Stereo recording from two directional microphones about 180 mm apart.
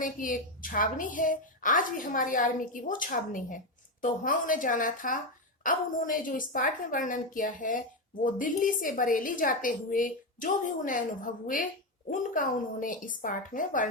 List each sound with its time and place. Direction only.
0.0 s a woman's voice: 50° left (ahead or behind)